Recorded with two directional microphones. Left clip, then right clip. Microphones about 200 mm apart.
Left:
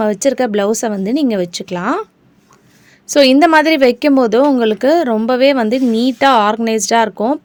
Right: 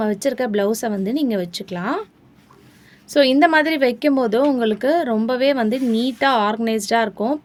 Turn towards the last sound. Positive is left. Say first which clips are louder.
# left 6 dB
turn(degrees=45)  # may be behind; listen again after turning